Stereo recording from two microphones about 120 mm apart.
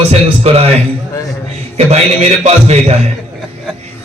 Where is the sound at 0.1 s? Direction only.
60° right (ahead or behind).